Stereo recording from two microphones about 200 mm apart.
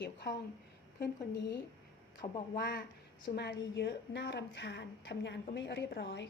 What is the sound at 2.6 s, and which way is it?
A woman's voice, 55° left (ahead or behind).